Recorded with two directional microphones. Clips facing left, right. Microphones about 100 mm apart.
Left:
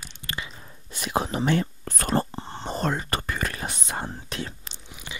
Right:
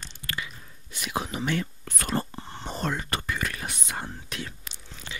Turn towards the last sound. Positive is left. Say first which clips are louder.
# left 1 dB
turn(degrees=15)  # may be behind; listen again after turning